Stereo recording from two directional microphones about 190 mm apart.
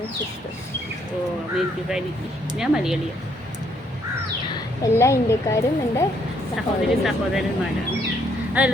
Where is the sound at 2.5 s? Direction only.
5° right (ahead or behind).